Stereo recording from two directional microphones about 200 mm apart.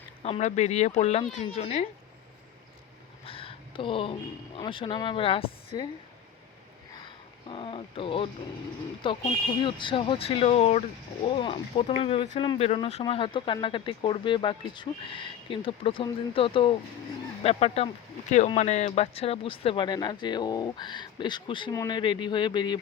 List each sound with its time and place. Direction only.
0.2 s speech: 35° left (ahead or behind)
3.2 s speech: 30° left (ahead or behind)
6.9 s a sound: 25° left (ahead or behind)
9.0 s speech: 25° left (ahead or behind)